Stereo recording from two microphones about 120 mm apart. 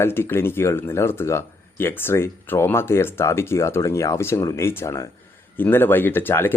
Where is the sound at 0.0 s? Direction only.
20° left (ahead or behind).